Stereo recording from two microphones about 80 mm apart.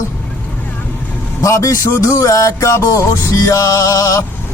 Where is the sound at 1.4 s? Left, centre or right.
Left.